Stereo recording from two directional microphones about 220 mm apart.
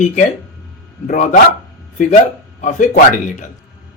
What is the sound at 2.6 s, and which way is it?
Speech, 35° left (ahead or behind).